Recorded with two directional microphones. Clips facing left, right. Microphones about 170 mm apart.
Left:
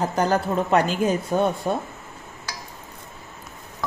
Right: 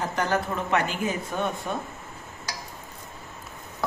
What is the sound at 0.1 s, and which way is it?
Speech, 35° left (ahead or behind).